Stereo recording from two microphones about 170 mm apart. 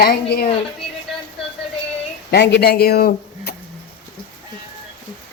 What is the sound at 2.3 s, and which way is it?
Speech, 80° left.